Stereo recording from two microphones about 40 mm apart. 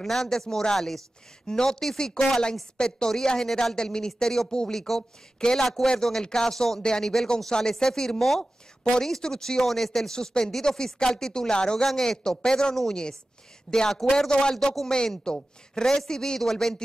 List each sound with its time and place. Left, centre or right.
0.0 s speech: centre
1.5 s speech: centre
4.7 s speech: centre
10.1 s speech: centre